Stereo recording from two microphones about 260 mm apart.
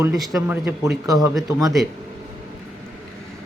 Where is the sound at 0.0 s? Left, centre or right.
Centre.